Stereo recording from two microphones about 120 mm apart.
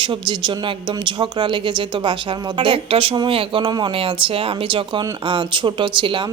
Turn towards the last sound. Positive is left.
turn(degrees=-45)  # may be behind; listen again after turning